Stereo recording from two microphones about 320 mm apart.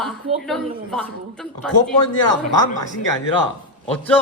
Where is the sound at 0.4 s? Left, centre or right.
Centre.